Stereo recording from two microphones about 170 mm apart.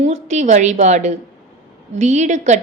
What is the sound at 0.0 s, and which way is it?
A woman's voice, 45° right (ahead or behind).